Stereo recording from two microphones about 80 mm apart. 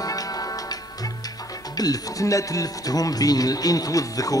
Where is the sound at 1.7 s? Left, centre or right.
Left.